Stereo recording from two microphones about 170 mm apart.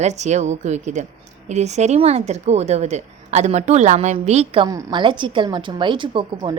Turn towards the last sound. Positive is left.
turn(degrees=-30)  # may be behind; listen again after turning